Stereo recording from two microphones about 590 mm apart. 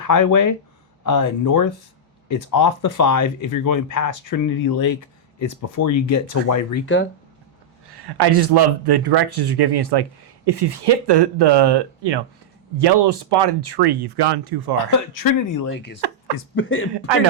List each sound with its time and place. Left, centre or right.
0.0 s speech: left
5.4 s speech: left
7.9 s speech: right
14.8 s speech: left
15.7 s speech: centre